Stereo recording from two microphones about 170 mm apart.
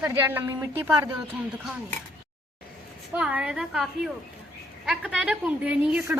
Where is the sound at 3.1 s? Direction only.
5° right (ahead or behind).